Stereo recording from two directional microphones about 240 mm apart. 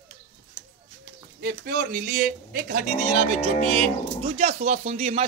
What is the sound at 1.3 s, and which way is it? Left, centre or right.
A man's voice, right.